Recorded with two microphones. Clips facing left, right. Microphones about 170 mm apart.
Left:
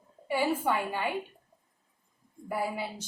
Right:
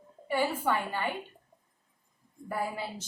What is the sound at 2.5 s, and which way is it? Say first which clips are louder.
Speech: left 1 dB; 10° left (ahead or behind).